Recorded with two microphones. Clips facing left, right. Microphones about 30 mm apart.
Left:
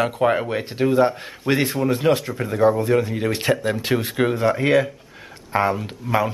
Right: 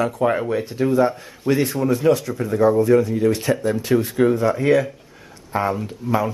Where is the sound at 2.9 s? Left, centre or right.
Left.